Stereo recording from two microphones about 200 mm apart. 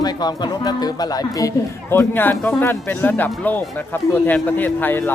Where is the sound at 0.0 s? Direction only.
20° left (ahead or behind).